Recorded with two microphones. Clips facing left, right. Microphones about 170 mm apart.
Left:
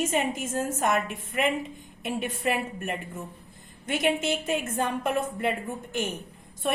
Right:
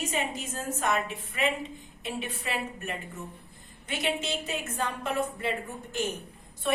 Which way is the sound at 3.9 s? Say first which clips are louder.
Left 5 dB; 50° left (ahead or behind).